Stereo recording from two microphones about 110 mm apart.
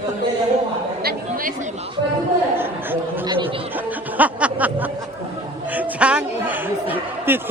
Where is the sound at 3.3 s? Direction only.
55° right (ahead or behind).